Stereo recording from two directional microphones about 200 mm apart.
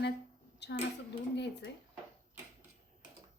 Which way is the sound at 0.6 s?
60° left (ahead or behind).